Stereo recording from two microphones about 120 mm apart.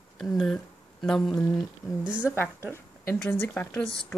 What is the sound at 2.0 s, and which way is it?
Speech, 10° right (ahead or behind).